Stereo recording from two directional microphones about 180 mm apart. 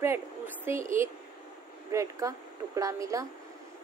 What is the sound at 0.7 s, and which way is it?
Speech, 15° right (ahead or behind).